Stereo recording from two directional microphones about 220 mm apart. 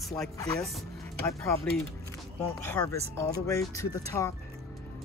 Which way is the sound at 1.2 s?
15° left (ahead or behind).